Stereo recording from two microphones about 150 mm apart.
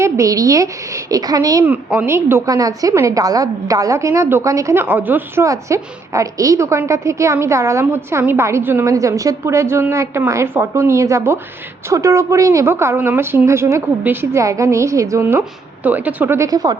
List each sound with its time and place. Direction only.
0.0 s a woman's voice: 20° right (ahead or behind)
1.6 s a woman's voice: 10° right (ahead or behind)